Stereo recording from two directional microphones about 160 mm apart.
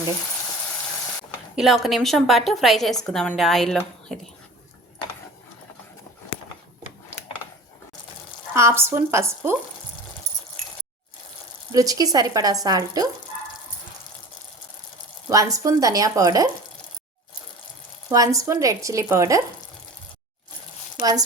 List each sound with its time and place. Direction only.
1.5 s a woman's voice: centre (ahead or behind)
8.5 s speech: 15° right (ahead or behind)
11.7 s speech: 20° right (ahead or behind)
15.3 s speech: 20° right (ahead or behind)
18.1 s speech: 20° right (ahead or behind)
21.0 s speech: 25° right (ahead or behind)